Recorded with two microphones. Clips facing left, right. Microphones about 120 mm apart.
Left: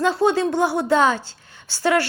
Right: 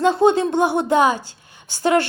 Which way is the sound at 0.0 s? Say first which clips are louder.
Right 3 dB; 20° right (ahead or behind).